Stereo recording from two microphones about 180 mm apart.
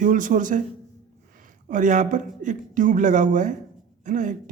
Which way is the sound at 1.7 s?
45° right (ahead or behind).